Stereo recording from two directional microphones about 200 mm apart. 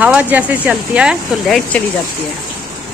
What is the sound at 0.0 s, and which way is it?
Speech, 10° right (ahead or behind).